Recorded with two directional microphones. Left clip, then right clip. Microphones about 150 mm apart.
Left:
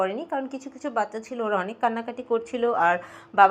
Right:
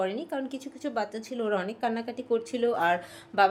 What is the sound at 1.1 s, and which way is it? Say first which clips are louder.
Speech: left 3 dB; 20° right (ahead or behind).